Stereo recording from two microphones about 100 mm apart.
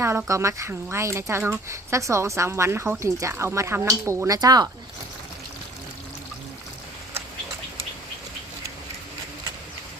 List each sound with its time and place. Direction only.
0.3 s speech: 30° right (ahead or behind)
4.4 s speech: 40° right (ahead or behind)